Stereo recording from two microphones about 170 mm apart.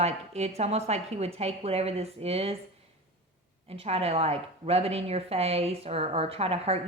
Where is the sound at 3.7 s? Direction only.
35° right (ahead or behind).